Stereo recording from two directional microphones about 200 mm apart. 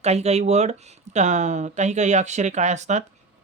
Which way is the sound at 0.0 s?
35° right (ahead or behind).